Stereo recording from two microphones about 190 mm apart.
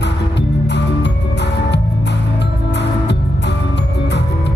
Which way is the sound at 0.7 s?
65° left (ahead or behind).